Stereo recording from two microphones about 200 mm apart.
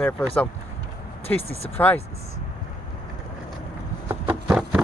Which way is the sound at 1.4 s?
30° left (ahead or behind).